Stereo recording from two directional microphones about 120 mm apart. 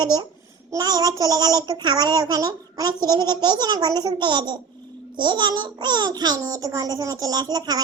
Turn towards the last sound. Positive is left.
turn(degrees=-30)  # may be behind; listen again after turning